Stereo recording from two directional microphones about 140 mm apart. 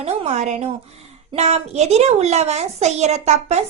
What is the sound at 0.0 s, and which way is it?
A child's voice, 55° right (ahead or behind).